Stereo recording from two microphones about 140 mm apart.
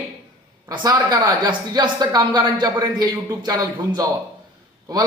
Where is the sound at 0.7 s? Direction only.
30° right (ahead or behind).